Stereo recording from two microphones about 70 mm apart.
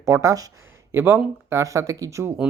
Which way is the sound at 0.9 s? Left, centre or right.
Right.